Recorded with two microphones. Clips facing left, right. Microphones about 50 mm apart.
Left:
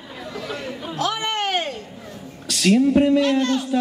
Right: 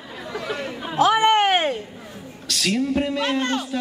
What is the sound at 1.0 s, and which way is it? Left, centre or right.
Chatter, right.